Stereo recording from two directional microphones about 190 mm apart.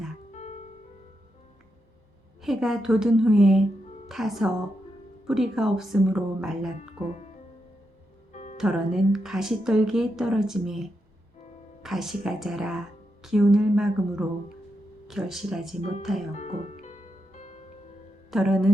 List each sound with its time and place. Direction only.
0.3 s music: 35° left (ahead or behind)
2.4 s speech: centre (ahead or behind)
8.3 s music: 35° left (ahead or behind)
8.5 s speech: 5° right (ahead or behind)
16.3 s music: 35° left (ahead or behind)
18.3 s speech: centre (ahead or behind)